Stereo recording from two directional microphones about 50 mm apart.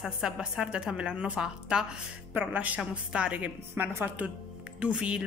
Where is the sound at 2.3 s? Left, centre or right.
Right.